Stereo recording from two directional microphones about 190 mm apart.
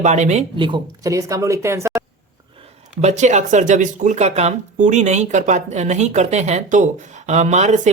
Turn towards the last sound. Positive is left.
turn(degrees=-40)  # may be behind; listen again after turning